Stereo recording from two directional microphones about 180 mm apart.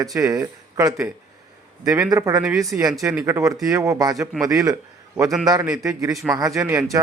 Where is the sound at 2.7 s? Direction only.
10° right (ahead or behind).